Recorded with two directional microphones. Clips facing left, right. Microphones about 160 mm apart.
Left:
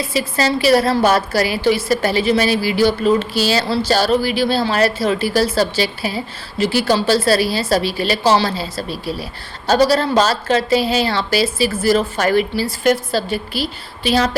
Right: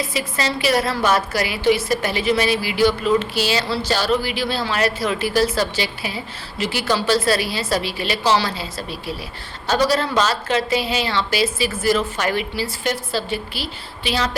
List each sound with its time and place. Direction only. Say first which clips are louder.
0.1 s a woman's voice: left 5 dB; 35° left (ahead or behind)